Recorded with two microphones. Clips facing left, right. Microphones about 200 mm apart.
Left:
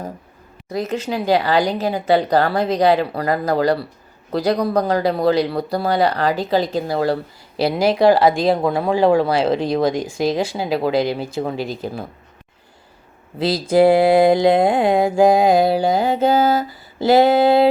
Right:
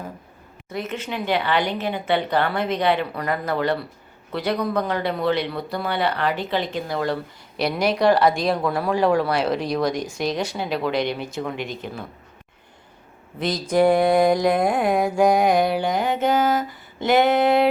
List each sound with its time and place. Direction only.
0.7 s speech: 35° left (ahead or behind)
8.4 s mantra: 25° left (ahead or behind)
13.4 s mantra: 30° left (ahead or behind)